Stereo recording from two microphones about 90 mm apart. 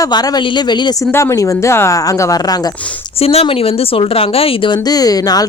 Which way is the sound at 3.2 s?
90° left.